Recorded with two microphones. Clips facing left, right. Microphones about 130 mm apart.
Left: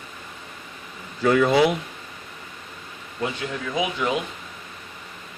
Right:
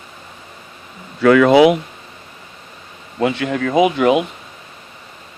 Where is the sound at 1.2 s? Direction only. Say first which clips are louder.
Right 8 dB; 80° right.